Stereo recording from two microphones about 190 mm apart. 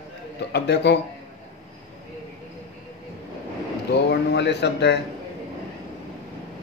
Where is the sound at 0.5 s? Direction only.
60° left (ahead or behind).